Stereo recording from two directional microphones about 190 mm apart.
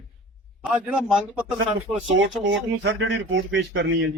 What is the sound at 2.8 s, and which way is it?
Speech, 70° right (ahead or behind).